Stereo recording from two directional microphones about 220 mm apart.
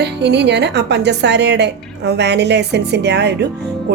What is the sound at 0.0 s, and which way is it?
Speech, 50° right (ahead or behind).